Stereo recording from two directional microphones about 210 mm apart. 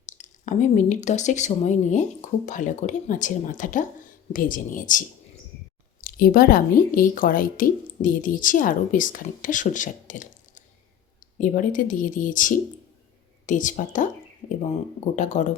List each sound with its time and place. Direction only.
0.0 s a woman's voice: 35° left (ahead or behind)